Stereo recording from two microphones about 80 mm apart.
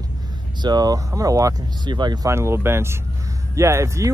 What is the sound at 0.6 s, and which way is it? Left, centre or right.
Speech, right.